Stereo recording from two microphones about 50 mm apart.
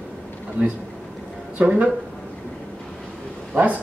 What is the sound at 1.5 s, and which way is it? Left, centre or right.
Speech, right.